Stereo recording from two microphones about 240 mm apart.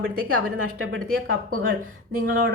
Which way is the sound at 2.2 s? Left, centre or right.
Right.